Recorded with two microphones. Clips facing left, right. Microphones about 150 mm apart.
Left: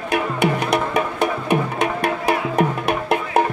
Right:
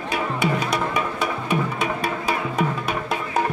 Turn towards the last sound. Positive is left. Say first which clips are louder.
# left 5 dB
turn(degrees=60)  # may be behind; listen again after turning